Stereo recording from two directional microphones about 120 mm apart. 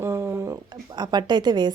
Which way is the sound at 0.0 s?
20° right (ahead or behind).